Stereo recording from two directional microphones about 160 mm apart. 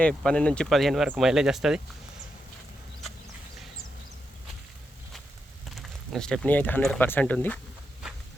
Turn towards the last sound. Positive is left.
turn(degrees=10)  # may be behind; listen again after turning